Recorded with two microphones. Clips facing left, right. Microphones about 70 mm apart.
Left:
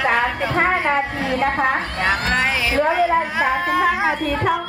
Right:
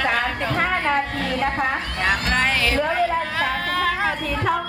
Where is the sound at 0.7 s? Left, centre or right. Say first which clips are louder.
Left 2 dB; centre.